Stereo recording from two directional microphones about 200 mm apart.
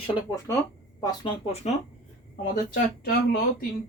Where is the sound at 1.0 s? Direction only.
20° left (ahead or behind).